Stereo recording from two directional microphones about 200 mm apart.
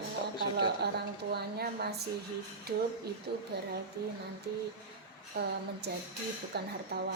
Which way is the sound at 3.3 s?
55° right (ahead or behind).